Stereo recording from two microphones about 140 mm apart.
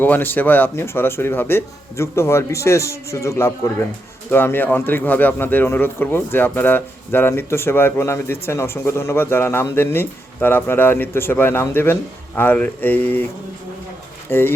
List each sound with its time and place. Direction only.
0.0 s speech: 15° left (ahead or behind)
14.3 s speech: 15° left (ahead or behind)